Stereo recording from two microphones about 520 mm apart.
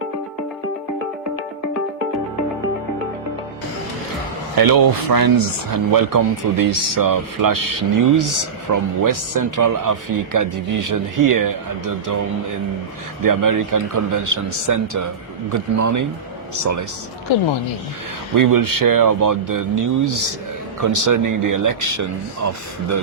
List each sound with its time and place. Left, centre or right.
4.5 s speech: right
18.3 s speech: right